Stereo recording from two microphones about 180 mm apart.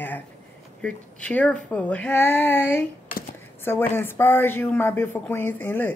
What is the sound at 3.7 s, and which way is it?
Speech, 10° left (ahead or behind).